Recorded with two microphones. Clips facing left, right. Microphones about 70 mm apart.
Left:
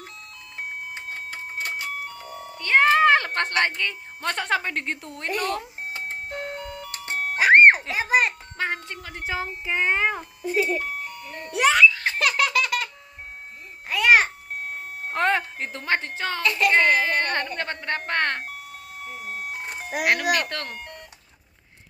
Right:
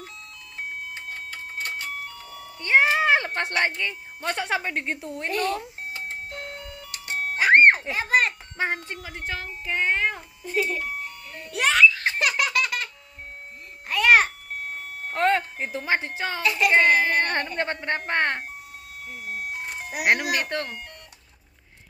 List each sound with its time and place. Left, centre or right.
0.9 s printer: left
2.0 s music: left
2.6 s music: centre
3.5 s speech: centre
7.3 s music: centre
7.9 s child singing: centre
8.5 s speech: right
9.2 s child singing: centre
11.5 s baby laughter: centre
13.8 s a sound: centre
15.1 s wind chime: centre
15.6 s speech: centre
20.1 s speech: centre